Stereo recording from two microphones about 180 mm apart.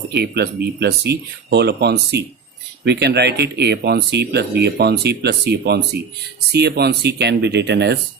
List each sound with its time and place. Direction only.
0.1 s speech: 65° right (ahead or behind)